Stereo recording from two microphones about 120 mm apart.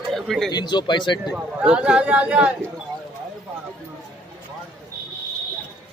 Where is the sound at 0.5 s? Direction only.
35° left (ahead or behind).